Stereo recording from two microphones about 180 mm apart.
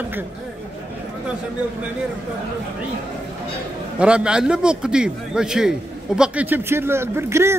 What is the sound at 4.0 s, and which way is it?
A man's voice, 5° right (ahead or behind).